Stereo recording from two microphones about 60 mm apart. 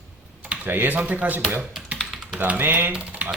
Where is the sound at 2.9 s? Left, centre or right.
Right.